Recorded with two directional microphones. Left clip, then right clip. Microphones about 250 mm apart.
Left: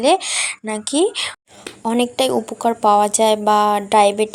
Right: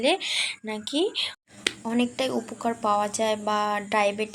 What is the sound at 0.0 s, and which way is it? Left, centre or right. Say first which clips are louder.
Speech: left 8 dB; centre.